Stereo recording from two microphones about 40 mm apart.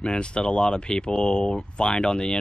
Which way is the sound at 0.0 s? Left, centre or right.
Left.